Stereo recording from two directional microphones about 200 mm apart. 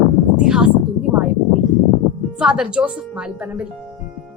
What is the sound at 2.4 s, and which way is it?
A woman's voice, 5° right (ahead or behind).